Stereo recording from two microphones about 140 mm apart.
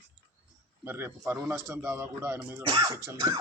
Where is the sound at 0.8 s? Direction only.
15° right (ahead or behind).